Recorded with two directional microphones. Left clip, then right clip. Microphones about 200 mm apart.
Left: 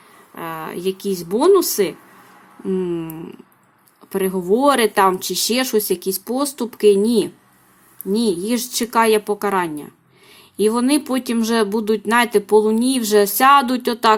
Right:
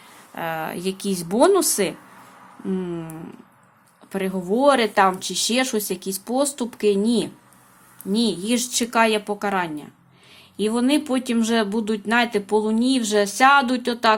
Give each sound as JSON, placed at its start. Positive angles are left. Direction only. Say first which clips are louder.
{"t": 0.3, "sound": "speech", "louder": "right 1 dB", "side_deg": 0}